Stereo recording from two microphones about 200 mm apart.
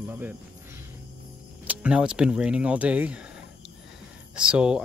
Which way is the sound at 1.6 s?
5° right (ahead or behind).